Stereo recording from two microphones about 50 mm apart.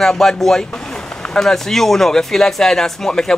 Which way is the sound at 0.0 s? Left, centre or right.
Centre.